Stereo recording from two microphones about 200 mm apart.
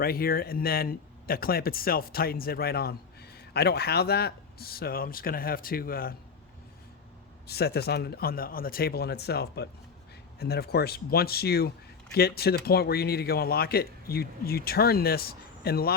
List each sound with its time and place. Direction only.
0.0 s speech: 50° left (ahead or behind)
7.4 s speech: 50° left (ahead or behind)